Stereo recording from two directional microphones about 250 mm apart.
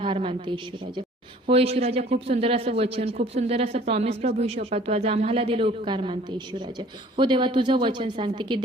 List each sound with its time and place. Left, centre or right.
0.0 s a man's voice: right